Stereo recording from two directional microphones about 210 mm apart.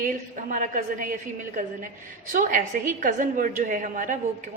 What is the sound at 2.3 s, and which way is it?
A woman's voice, 40° right (ahead or behind).